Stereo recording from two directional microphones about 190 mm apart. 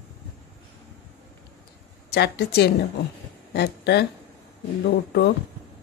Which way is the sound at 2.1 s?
60° left (ahead or behind).